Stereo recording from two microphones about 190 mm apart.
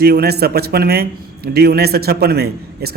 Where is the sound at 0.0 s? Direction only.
55° right (ahead or behind).